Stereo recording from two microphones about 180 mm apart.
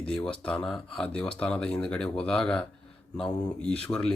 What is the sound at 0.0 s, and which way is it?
Speech, 5° left (ahead or behind).